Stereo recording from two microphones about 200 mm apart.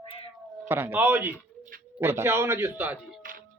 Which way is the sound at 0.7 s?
10° right (ahead or behind).